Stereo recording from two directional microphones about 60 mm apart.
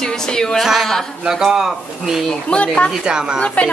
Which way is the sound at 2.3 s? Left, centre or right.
Centre.